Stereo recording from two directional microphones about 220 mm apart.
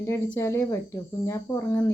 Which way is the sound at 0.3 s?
10° left (ahead or behind).